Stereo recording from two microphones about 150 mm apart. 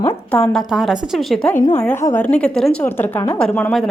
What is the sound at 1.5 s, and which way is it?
Speech, 50° left (ahead or behind).